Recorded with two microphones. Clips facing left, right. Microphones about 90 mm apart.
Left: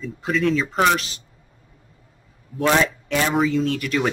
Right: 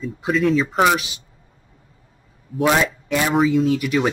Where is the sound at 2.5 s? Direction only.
10° right (ahead or behind).